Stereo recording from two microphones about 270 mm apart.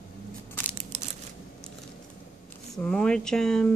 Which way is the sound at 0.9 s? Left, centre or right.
Right.